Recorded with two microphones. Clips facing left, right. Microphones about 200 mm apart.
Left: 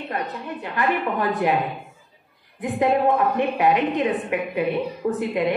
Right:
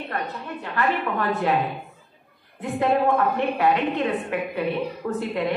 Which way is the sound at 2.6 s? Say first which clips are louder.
Left 2 dB; 15° left (ahead or behind).